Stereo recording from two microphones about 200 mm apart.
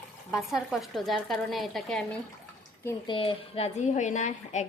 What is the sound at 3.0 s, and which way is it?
Speech, 30° left (ahead or behind).